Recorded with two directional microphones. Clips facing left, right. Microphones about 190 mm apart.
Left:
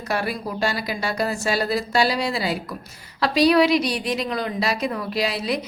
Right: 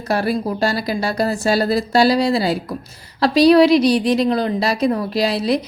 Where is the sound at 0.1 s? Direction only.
35° right (ahead or behind).